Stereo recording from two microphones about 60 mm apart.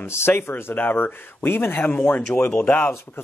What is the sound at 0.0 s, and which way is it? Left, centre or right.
Speech, left.